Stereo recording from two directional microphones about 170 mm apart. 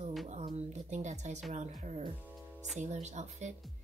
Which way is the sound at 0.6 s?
40° right (ahead or behind).